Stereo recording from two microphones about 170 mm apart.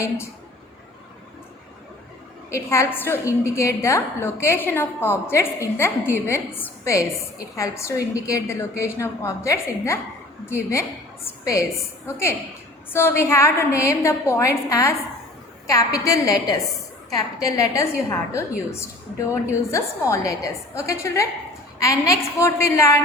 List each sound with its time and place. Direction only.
2.6 s a woman's voice: 15° left (ahead or behind)